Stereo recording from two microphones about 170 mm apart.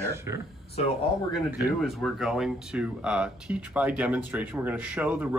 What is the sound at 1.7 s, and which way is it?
Speech, centre (ahead or behind).